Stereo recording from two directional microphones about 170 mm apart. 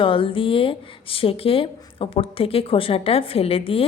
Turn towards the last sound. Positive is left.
turn(degrees=35)  # may be behind; listen again after turning